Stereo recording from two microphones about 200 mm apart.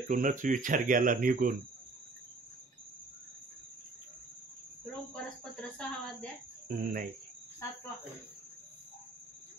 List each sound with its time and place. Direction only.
0.1 s speech: 40° right (ahead or behind)
5.1 s speech: 5° left (ahead or behind)
6.7 s speech: 45° right (ahead or behind)